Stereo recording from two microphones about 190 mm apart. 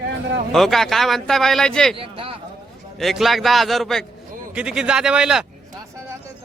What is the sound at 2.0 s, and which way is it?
Speech, 30° right (ahead or behind).